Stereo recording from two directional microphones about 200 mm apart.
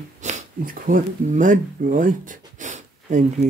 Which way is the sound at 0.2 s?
40° right (ahead or behind).